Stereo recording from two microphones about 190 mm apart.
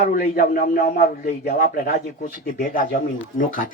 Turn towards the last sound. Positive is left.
turn(degrees=45)  # may be behind; listen again after turning